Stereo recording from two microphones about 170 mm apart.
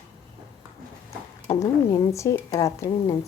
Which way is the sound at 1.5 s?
15° left (ahead or behind).